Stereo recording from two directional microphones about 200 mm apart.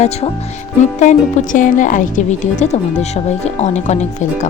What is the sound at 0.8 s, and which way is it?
Speech, 35° left (ahead or behind).